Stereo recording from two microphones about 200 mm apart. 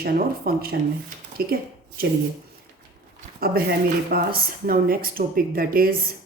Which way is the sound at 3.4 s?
50° right (ahead or behind).